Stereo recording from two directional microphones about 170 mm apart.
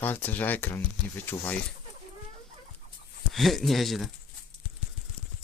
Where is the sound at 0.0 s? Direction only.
10° left (ahead or behind).